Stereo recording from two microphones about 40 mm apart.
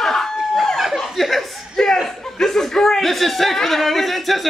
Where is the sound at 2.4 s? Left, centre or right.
Centre.